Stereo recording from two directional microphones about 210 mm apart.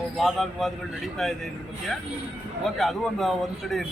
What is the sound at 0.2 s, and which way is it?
Speech, centre (ahead or behind).